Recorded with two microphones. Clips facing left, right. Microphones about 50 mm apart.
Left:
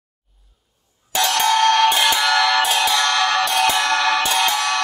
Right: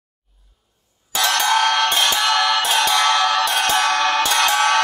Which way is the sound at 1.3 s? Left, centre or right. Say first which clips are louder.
Left 2 dB; centre.